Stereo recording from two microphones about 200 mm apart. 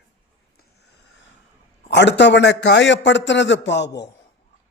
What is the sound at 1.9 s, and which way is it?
A man's voice, 60° left (ahead or behind).